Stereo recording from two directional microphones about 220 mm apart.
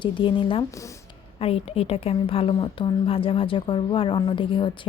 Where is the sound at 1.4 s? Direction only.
25° left (ahead or behind).